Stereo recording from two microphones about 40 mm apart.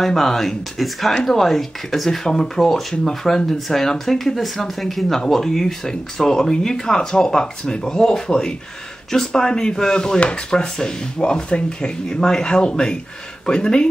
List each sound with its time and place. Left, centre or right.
0.0 s speech: centre